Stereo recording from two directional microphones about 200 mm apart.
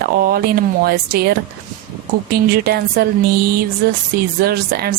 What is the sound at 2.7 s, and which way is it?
Speech, 50° right (ahead or behind).